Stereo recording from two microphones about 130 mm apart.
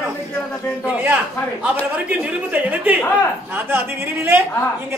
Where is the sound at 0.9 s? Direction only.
15° right (ahead or behind).